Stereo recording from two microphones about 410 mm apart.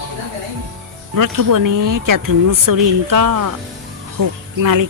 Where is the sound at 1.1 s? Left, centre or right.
Right.